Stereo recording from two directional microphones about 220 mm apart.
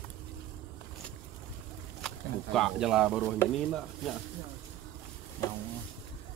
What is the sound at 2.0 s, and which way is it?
Speech, centre (ahead or behind).